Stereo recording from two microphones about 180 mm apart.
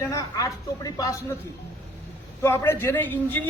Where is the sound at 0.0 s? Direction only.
20° left (ahead or behind).